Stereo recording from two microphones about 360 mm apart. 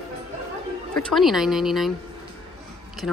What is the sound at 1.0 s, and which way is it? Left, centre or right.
Speech, centre.